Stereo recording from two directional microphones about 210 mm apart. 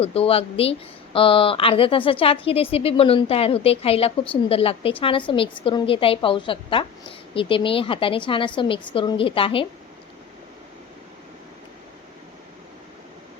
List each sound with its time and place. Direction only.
0.0 s speech: 30° left (ahead or behind)